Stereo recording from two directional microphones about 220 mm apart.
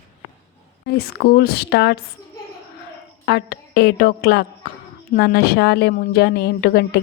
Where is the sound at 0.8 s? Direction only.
45° left (ahead or behind).